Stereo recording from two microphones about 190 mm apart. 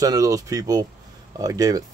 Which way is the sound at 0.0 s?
20° right (ahead or behind).